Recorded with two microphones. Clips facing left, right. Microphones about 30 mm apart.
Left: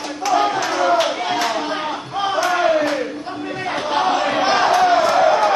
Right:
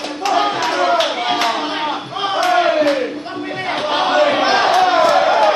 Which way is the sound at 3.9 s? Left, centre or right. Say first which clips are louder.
Right 4 dB; right.